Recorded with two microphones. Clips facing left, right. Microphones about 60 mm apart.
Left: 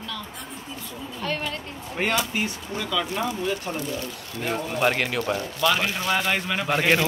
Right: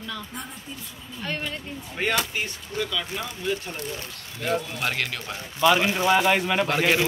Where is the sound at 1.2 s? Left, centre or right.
Centre.